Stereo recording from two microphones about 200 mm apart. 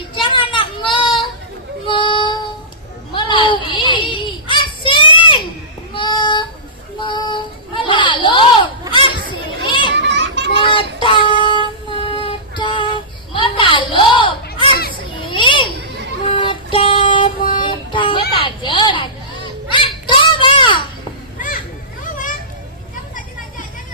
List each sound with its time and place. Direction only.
0.1 s a sound: 25° left (ahead or behind)
1.9 s female singing: 25° left (ahead or behind)
3.1 s a sound: 25° left (ahead or behind)
5.9 s child singing: 25° left (ahead or behind)
8.9 s children playing: 25° left (ahead or behind)
9.9 s children playing: 60° right (ahead or behind)
11.0 s child singing: 25° left (ahead or behind)
15.2 s children playing: 25° left (ahead or behind)
16.3 s child singing: 25° left (ahead or behind)
18.4 s a sound: 25° left (ahead or behind)
19.7 s children playing: 25° left (ahead or behind)
21.4 s children playing: 40° left (ahead or behind)